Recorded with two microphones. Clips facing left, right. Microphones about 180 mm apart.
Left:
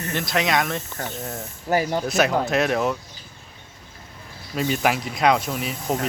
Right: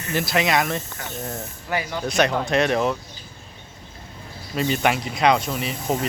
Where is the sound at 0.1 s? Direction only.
5° right (ahead or behind).